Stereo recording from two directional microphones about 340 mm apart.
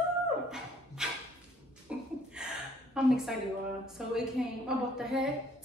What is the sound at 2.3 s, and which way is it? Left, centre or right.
Gasp, centre.